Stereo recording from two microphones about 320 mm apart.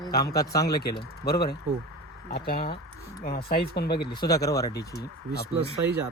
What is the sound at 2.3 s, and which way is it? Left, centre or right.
Speech, left.